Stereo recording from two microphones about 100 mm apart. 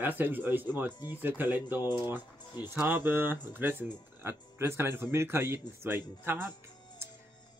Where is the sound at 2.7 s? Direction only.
15° right (ahead or behind).